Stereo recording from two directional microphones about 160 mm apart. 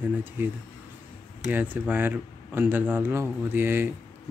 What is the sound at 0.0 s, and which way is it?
Speech, 10° right (ahead or behind).